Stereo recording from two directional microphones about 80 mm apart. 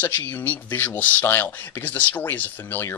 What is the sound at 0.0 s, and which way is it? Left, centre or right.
Speech, left.